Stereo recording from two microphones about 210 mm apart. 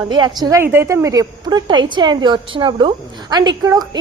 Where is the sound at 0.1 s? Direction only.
20° right (ahead or behind).